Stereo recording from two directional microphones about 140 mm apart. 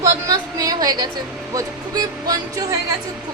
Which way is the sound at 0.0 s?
25° right (ahead or behind).